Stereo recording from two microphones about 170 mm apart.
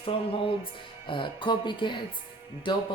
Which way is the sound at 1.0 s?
30° left (ahead or behind).